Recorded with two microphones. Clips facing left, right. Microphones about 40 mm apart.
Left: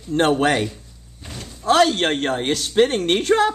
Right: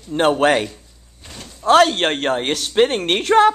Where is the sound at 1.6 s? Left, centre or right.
Right.